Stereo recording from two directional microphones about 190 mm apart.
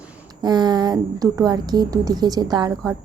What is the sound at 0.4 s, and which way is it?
A woman's voice, 20° right (ahead or behind).